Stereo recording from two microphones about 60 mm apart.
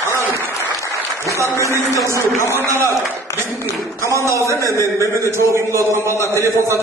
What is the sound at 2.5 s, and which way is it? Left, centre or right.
Speech, right.